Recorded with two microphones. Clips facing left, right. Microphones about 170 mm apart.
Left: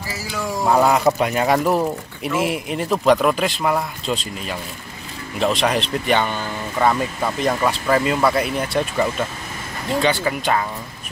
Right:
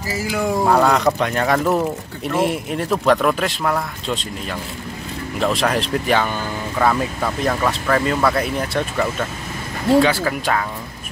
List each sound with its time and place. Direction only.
0.1 s speech: 55° right (ahead or behind)
0.7 s speech: 5° left (ahead or behind)